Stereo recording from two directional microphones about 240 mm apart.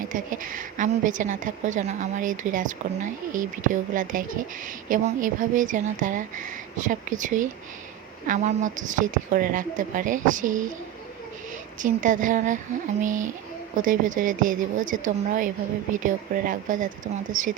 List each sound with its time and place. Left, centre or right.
0.1 s a woman's voice: right
11.8 s a woman's voice: right